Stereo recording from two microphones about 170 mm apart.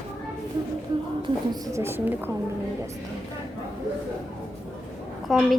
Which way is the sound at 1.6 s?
15° right (ahead or behind).